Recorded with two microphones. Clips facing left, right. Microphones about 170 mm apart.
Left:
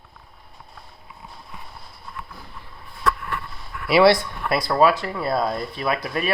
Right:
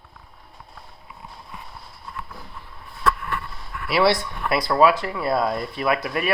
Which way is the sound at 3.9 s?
90° left.